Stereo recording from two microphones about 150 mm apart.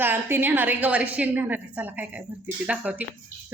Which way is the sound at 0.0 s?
15° right (ahead or behind).